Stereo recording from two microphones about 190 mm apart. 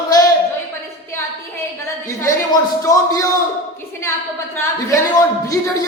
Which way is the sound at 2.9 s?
20° left (ahead or behind).